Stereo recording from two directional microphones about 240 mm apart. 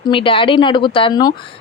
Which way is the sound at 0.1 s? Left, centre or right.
Left.